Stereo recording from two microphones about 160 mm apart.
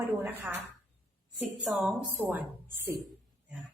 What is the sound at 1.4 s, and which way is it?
A woman's voice, centre (ahead or behind).